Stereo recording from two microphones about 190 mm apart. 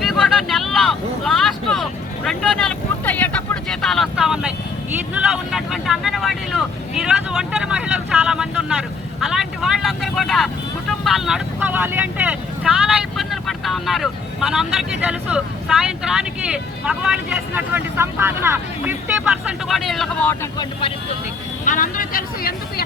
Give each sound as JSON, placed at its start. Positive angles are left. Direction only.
{"t": 0.0, "sound": "vehicle", "side_deg": 0}
{"t": 9.2, "sound": "speech", "side_deg": 0}
{"t": 20.4, "sound": "speech", "side_deg": 20}
{"t": 21.6, "sound": "speech", "side_deg": 45}